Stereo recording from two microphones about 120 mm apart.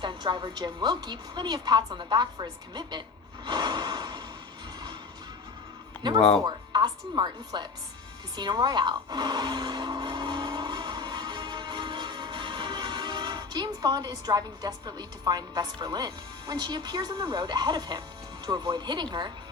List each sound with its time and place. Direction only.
0.0 s a woman's voice: 40° right (ahead or behind)
3.4 s gasp: 40° right (ahead or behind)
6.4 s a woman's voice: 35° right (ahead or behind)